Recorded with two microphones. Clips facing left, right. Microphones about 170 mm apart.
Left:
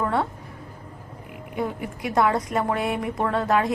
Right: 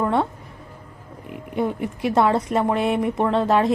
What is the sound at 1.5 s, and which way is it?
A woman's voice, 25° right (ahead or behind).